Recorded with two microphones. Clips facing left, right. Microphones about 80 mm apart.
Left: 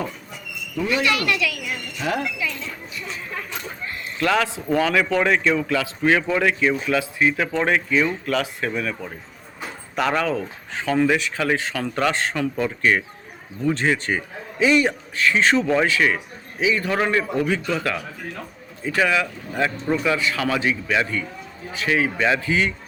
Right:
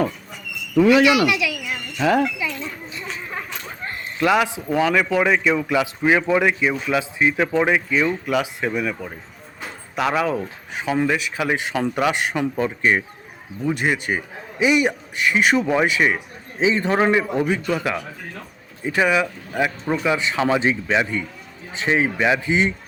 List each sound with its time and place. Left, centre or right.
0.8 s speech: right
1.0 s speech: centre
2.4 s a sound: right
4.2 s speech: centre